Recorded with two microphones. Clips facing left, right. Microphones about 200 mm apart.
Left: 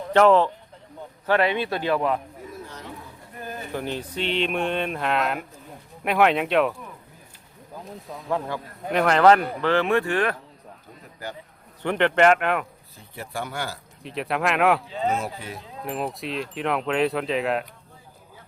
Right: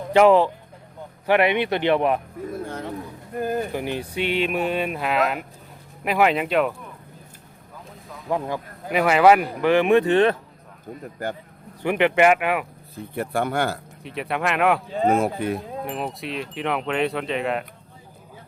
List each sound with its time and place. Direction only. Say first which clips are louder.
0.1 s speech: right 2 dB; 10° right (ahead or behind)
2.5 s a sound: right 9 dB; 55° right (ahead or behind)
3.8 s speech: right 3 dB; 10° right (ahead or behind)
8.3 s speech: right 2 dB; 15° right (ahead or behind)
8.9 s speech: right 1 dB; 5° right (ahead or behind); by 10.3 s 25° right (ahead or behind)
11.8 s speech: right 1 dB; 10° right (ahead or behind)
13.0 s speech: right 8 dB; 55° right (ahead or behind)
14.0 s speech: left 1 dB; centre (ahead or behind)
14.8 s speech: right 6 dB; 50° right (ahead or behind)
15.8 s speech: even; centre (ahead or behind)